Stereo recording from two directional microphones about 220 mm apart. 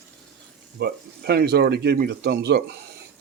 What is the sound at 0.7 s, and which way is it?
Speech, 50° right (ahead or behind).